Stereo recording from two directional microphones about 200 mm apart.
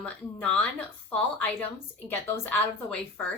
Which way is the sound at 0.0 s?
5° left (ahead or behind).